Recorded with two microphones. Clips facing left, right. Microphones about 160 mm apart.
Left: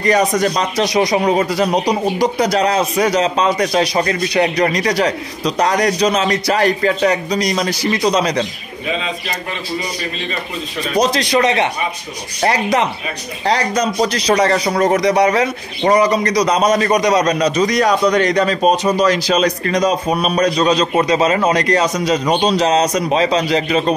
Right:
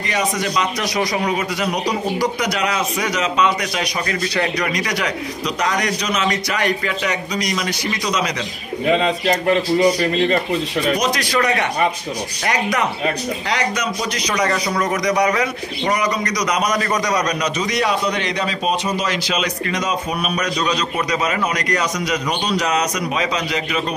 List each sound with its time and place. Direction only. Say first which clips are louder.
0.0 s a man's voice: left 7 dB; 40° left (ahead or behind)
0.8 s a man's voice: left 6 dB; 20° left (ahead or behind)
1.9 s a man's voice: left 4 dB; 20° left (ahead or behind)
8.8 s a man's voice: right 6 dB; 60° right (ahead or behind)
11.0 s a man's voice: left 5 dB; 25° left (ahead or behind); by 15.0 s 40° left (ahead or behind)
15.0 s a man's voice: left 4 dB; 30° left (ahead or behind)